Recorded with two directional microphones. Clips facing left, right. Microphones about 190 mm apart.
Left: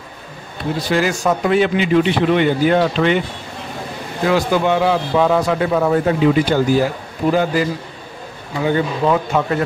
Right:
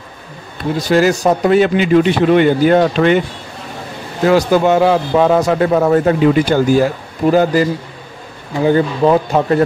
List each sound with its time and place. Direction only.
0.8 s a man's voice: 40° right (ahead or behind)
4.3 s a man's voice: 45° right (ahead or behind)
8.6 s speech: 35° right (ahead or behind)